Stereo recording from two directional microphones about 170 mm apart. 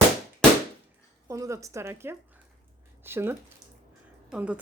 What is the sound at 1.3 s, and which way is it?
A woman's voice, 20° right (ahead or behind).